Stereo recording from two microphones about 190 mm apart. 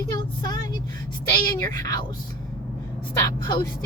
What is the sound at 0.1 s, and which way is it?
Vehicle, 20° left (ahead or behind).